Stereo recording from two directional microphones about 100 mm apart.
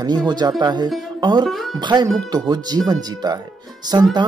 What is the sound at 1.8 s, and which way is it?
Speech, 50° right (ahead or behind).